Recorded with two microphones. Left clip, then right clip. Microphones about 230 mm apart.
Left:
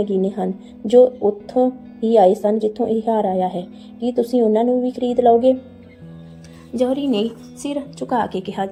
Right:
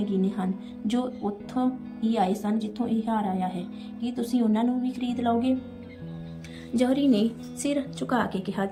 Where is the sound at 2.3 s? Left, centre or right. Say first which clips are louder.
Left 13 dB; centre.